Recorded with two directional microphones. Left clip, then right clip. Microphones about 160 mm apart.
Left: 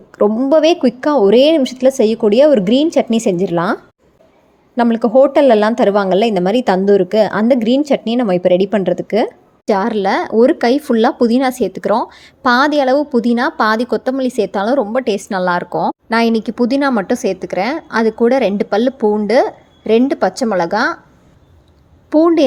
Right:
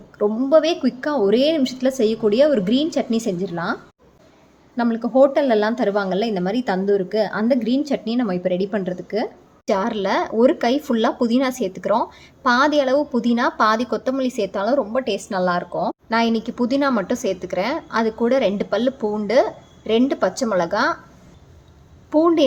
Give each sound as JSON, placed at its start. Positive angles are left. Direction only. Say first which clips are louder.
{"t": 0.3, "sound": "speech", "louder": "left 4 dB", "side_deg": 35}
{"t": 4.8, "sound": "a woman's voice", "louder": "left 6 dB", "side_deg": 45}
{"t": 9.6, "sound": "speech", "louder": "left 6 dB", "side_deg": 30}
{"t": 22.1, "sound": "speech", "louder": "left 5 dB", "side_deg": 30}